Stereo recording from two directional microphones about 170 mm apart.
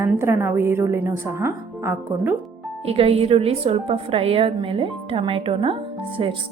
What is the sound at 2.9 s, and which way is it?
A woman's voice, 35° right (ahead or behind).